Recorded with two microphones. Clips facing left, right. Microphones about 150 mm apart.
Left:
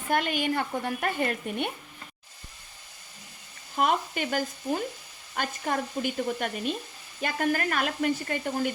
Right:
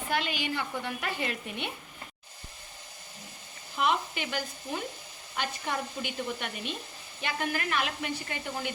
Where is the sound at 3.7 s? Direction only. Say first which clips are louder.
Left 3 dB; 45° left (ahead or behind).